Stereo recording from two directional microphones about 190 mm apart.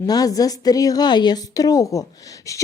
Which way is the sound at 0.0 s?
20° left (ahead or behind).